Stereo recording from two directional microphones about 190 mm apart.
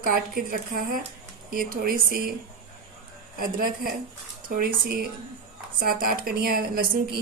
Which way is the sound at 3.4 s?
50° right (ahead or behind).